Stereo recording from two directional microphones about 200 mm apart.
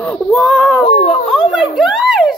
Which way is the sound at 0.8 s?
35° left (ahead or behind).